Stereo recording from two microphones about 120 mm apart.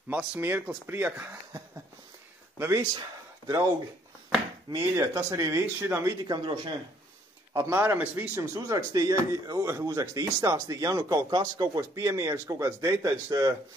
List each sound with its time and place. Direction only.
0.1 s speech: 15° right (ahead or behind)
2.6 s speech: 30° right (ahead or behind)
4.7 s speech: 25° right (ahead or behind)
6.2 s speech: 40° right (ahead or behind)
7.5 s speech: 20° right (ahead or behind)
8.4 s speech: 30° right (ahead or behind)